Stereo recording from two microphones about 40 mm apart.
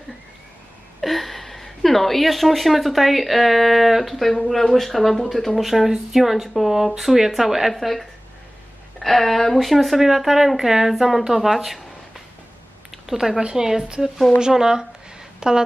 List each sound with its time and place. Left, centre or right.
1.0 s a woman's voice: centre
12.9 s a sound: centre
13.4 s a woman's voice: centre